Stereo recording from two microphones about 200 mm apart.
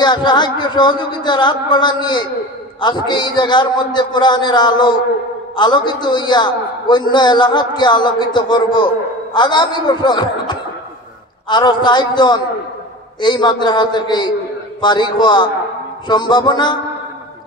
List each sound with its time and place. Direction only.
0.0 s a man's voice: 20° left (ahead or behind)